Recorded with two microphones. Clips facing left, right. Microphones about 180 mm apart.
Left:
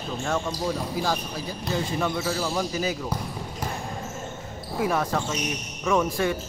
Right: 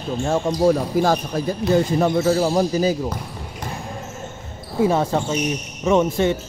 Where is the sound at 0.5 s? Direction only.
50° right (ahead or behind); by 3.0 s 35° right (ahead or behind).